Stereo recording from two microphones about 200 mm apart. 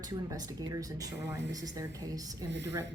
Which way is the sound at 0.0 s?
20° right (ahead or behind).